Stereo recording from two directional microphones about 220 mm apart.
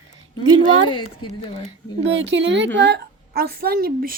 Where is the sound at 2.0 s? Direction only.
55° right (ahead or behind).